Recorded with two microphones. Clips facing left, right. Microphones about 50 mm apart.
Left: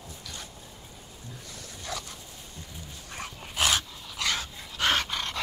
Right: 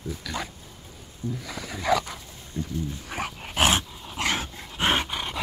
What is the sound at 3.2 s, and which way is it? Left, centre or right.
Dog, right.